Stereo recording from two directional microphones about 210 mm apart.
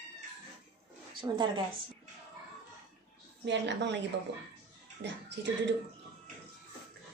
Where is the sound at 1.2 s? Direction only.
20° right (ahead or behind).